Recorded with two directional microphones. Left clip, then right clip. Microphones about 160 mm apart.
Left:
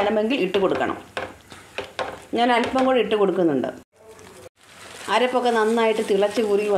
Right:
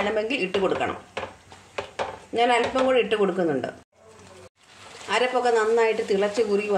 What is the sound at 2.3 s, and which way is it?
A woman's voice, 35° left (ahead or behind).